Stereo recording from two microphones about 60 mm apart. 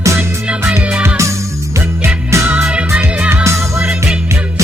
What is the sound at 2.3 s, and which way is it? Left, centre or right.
Music, right.